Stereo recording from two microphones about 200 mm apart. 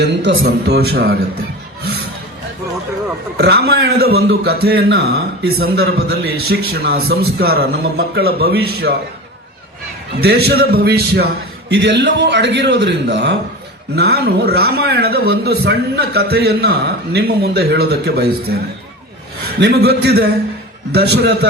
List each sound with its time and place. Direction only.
0.0 s a man's voice: 60° right (ahead or behind)
3.3 s a man's voice: 55° right (ahead or behind)
10.2 s a man's voice: 50° right (ahead or behind)
11.7 s a man's voice: 65° right (ahead or behind)
19.5 s a man's voice: 55° right (ahead or behind)